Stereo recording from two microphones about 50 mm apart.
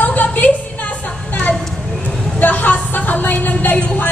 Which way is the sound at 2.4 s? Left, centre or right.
Left.